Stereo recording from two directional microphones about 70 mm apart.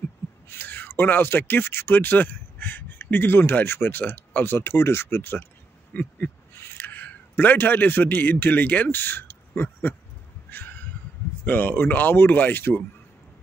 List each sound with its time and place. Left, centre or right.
0.5 s speech: left
5.9 s a sound: left
6.5 s a man's voice: left
11.4 s speech: left